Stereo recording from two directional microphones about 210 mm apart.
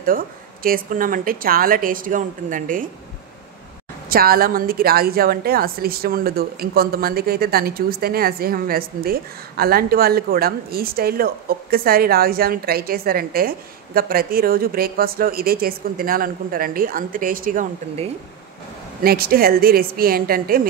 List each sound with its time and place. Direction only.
0.0 s speech: 45° right (ahead or behind)
4.1 s a woman's voice: 45° right (ahead or behind)
19.0 s a woman's voice: 45° right (ahead or behind)